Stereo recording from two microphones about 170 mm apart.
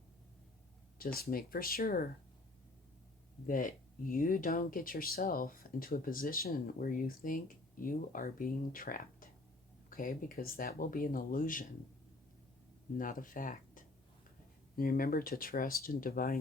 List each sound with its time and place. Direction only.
0.9 s speech: 60° left (ahead or behind)
3.4 s speech: 50° left (ahead or behind)
13.0 s speech: 55° left (ahead or behind)